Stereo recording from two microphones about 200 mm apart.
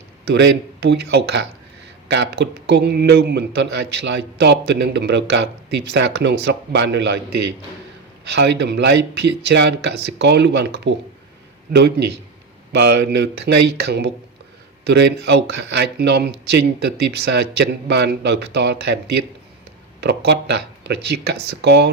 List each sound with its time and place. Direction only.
0.3 s speech: 55° right (ahead or behind)
8.3 s speech: 55° right (ahead or behind)
12.7 s speech: 55° right (ahead or behind)